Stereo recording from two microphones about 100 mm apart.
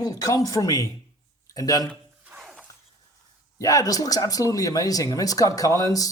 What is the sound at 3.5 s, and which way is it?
Speech, 35° left (ahead or behind).